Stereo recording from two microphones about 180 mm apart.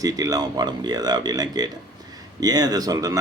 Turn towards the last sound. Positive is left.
turn(degrees=-20)  # may be behind; listen again after turning